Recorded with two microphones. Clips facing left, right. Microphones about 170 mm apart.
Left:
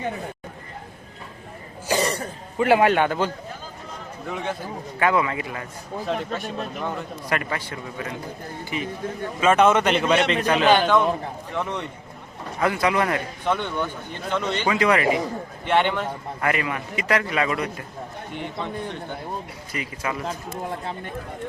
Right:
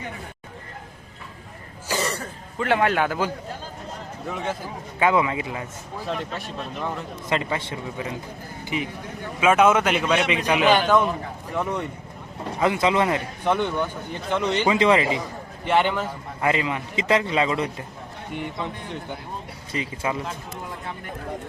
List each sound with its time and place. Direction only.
2.0 s speech: 15° left (ahead or behind); by 4.5 s centre (ahead or behind)
4.9 s speech: 20° right (ahead or behind)
6.1 s speech: centre (ahead or behind)
7.3 s a man's voice: 20° right (ahead or behind)
9.4 s a man's voice: 5° right (ahead or behind)
12.5 s speech: 20° right (ahead or behind)
15.6 s speech: 5° right (ahead or behind)
16.4 s speech: 20° right (ahead or behind)
19.7 s speech: 25° right (ahead or behind)